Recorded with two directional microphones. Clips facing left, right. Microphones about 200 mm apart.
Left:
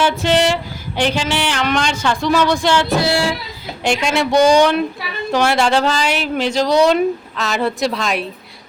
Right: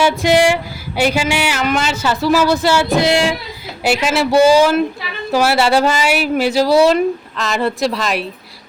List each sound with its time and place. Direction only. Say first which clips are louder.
0.0 s speech: right 3 dB; 10° right (ahead or behind)
3.0 s speech: right 3 dB; 15° right (ahead or behind)
3.8 s speech: right 2 dB; 5° right (ahead or behind)